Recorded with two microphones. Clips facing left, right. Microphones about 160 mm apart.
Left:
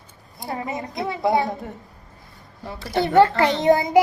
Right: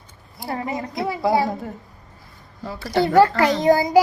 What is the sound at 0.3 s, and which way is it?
A child's voice, 20° left (ahead or behind).